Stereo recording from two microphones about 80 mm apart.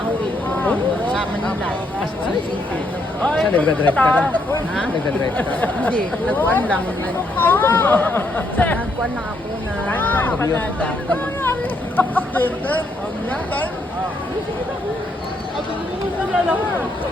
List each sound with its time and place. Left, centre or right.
3.2 s speech: centre
5.4 s speech: left
9.9 s speech: left
11.9 s a sound: left